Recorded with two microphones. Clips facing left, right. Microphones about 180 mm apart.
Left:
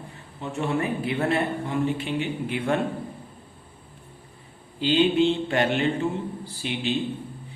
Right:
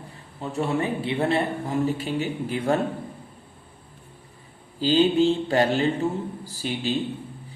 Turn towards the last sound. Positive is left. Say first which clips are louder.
# right 1 dB
turn(degrees=-40)  # may be behind; listen again after turning